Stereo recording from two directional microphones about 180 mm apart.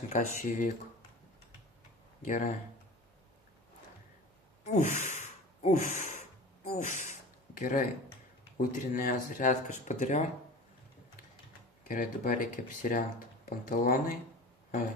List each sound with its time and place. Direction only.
0.1 s speech: 45° left (ahead or behind)
2.2 s speech: 45° left (ahead or behind)
4.6 s gasp: 40° left (ahead or behind)
6.7 s a sound: 45° left (ahead or behind)
8.5 s speech: 50° left (ahead or behind)
11.9 s speech: 50° left (ahead or behind)